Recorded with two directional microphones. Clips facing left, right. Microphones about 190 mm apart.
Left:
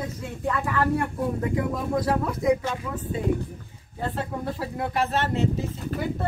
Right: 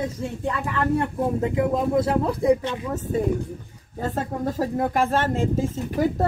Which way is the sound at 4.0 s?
45° right (ahead or behind).